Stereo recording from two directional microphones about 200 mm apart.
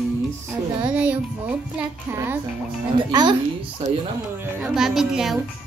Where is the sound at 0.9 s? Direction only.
5° right (ahead or behind).